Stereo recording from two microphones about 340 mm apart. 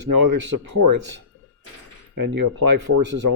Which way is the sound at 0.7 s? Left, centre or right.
Right.